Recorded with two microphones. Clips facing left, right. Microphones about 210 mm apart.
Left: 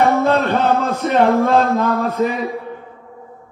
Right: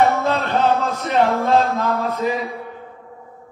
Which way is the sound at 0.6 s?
55° left (ahead or behind).